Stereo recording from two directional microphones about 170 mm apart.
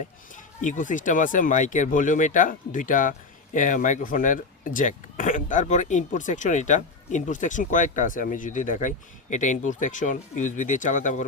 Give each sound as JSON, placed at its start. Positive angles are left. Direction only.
{"t": 0.0, "sound": "speech", "side_deg": 45}